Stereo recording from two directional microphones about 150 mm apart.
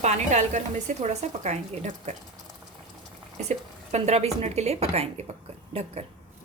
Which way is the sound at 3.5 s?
50° right (ahead or behind).